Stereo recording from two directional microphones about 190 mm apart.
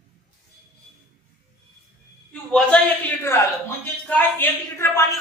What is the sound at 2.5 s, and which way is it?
A woman's voice, 5° left (ahead or behind).